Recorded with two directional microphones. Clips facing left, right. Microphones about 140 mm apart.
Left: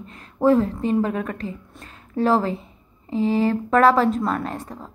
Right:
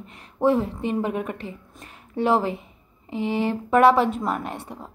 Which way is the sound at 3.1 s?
35° left (ahead or behind).